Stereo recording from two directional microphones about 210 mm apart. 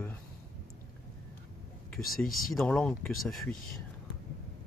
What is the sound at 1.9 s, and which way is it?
Speech, 45° left (ahead or behind).